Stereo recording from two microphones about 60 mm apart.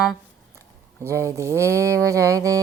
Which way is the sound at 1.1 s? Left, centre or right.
Right.